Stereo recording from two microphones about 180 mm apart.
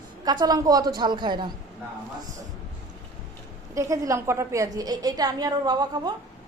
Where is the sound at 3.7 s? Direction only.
15° right (ahead or behind).